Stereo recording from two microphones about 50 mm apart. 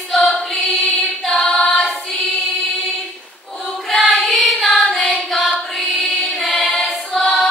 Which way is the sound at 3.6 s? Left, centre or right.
Centre.